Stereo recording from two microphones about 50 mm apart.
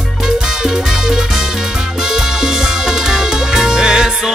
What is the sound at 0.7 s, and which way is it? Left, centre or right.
Music, centre.